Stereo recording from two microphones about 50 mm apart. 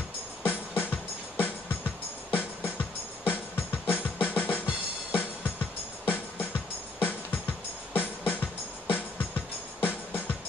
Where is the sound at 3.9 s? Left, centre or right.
Left.